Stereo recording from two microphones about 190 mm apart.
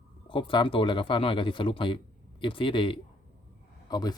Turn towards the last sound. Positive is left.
turn(degrees=20)  # may be behind; listen again after turning